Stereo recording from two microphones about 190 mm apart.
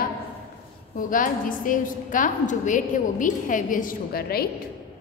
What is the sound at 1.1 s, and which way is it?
A woman's voice, 45° left (ahead or behind).